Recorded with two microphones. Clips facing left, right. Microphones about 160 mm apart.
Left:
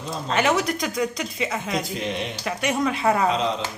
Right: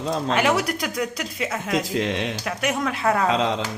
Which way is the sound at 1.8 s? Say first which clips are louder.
Right 4 dB; 90° right.